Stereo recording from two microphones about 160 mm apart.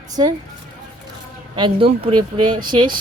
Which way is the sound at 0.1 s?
25° right (ahead or behind).